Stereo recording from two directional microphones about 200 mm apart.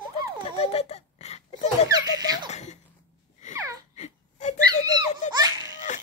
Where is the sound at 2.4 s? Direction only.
35° left (ahead or behind).